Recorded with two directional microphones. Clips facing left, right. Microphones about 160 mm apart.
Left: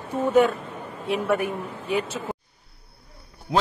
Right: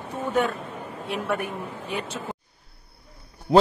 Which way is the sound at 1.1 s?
Centre (ahead or behind).